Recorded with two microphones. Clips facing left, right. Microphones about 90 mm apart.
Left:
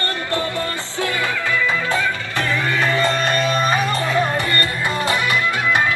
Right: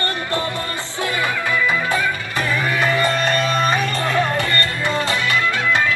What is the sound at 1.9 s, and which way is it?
Music, 15° right (ahead or behind).